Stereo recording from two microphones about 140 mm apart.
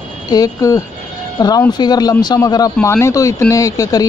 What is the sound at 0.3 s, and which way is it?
Speech, 25° left (ahead or behind).